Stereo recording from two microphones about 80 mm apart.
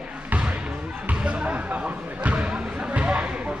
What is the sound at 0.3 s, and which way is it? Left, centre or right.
Basketball bounce, centre.